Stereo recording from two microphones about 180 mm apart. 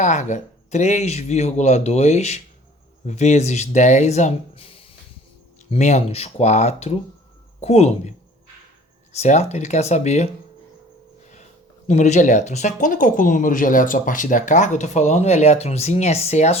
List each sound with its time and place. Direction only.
0.0 s speech: 40° left (ahead or behind)
5.7 s speech: 35° left (ahead or behind)
9.1 s speech: 40° left (ahead or behind)
11.9 s speech: 40° left (ahead or behind)